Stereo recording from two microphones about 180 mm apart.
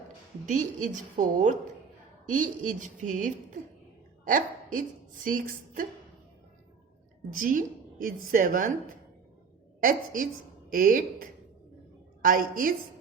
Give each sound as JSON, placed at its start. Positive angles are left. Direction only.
{"t": 0.4, "sound": "a woman's voice", "side_deg": -45}
{"t": 7.3, "sound": "a woman's voice", "side_deg": -50}
{"t": 9.8, "sound": "a woman's voice", "side_deg": -50}